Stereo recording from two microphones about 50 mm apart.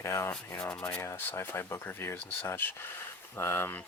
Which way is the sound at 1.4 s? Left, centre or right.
Left.